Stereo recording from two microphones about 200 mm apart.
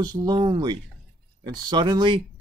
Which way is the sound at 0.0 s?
20° right (ahead or behind).